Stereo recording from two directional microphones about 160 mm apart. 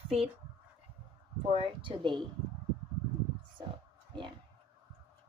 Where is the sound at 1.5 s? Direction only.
35° right (ahead or behind).